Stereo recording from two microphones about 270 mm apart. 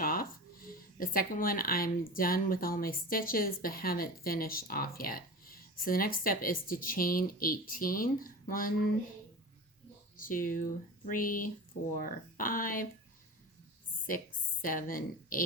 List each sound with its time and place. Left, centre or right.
0.0 s speech: left
10.2 s speech: left
14.6 s speech: left